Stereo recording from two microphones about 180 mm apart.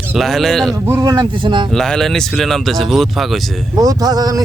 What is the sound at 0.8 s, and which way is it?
Speech, 15° right (ahead or behind).